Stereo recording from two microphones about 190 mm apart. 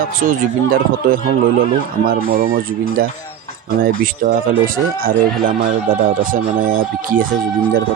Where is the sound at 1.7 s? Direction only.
50° right (ahead or behind).